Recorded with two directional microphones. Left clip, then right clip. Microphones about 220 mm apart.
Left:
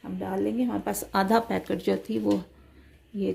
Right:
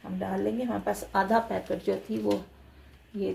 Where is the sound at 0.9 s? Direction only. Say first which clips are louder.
Even; 50° left (ahead or behind).